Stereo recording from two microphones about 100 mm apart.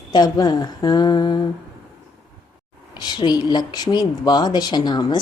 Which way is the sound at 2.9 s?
45° left (ahead or behind).